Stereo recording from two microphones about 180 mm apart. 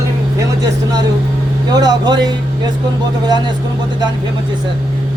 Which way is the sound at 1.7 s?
25° right (ahead or behind).